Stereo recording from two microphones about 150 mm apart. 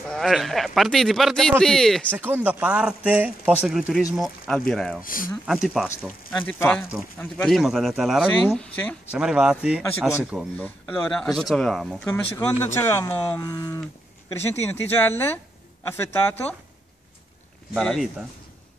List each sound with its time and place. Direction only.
0.1 s speech: centre (ahead or behind)
2.1 s speech: 10° right (ahead or behind); by 4.9 s 5° left (ahead or behind)
5.0 s speech: 65° left (ahead or behind)
5.5 s speech: 5° right (ahead or behind)
5.9 s speech: 10° left (ahead or behind)
7.4 s speech: centre (ahead or behind)
8.5 s speech: 10° left (ahead or behind)
9.1 s speech: 5° right (ahead or behind)
10.6 s speech: 10° left (ahead or behind)
12.5 s speech: 15° left (ahead or behind)
17.7 s speech: centre (ahead or behind)